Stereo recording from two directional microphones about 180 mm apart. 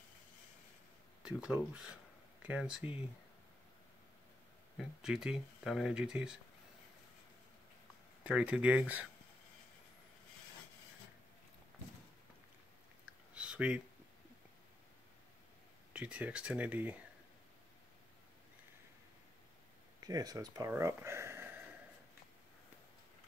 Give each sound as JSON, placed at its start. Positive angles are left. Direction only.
{"t": 1.2, "sound": "speech", "side_deg": -5}
{"t": 4.7, "sound": "speech", "side_deg": -5}
{"t": 8.2, "sound": "speech", "side_deg": -5}
{"t": 13.0, "sound": "a sound", "side_deg": -5}
{"t": 15.9, "sound": "speech", "side_deg": -5}
{"t": 20.0, "sound": "speech", "side_deg": -20}